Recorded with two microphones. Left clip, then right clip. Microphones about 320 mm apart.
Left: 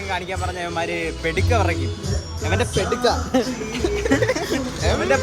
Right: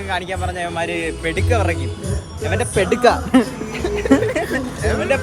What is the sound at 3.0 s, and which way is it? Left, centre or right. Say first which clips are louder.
Speech: right 6 dB; centre.